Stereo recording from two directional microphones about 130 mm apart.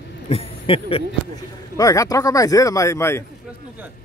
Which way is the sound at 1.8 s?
25° left (ahead or behind).